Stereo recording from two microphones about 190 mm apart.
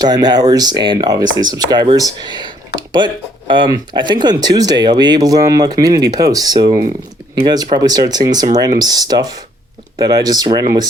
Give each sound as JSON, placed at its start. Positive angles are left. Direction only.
{"t": 0.0, "sound": "speech", "side_deg": -20}